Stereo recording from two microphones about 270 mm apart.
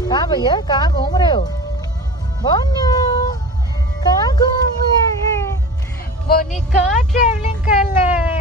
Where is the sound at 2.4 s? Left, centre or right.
Centre.